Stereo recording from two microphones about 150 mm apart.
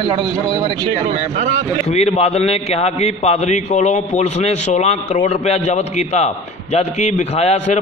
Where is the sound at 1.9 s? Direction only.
45° left (ahead or behind).